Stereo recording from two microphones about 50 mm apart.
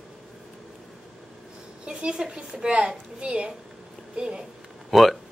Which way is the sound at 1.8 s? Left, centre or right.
Centre.